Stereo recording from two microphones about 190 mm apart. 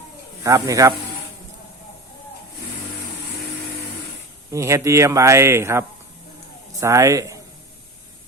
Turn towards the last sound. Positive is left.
turn(degrees=-15)  # may be behind; listen again after turning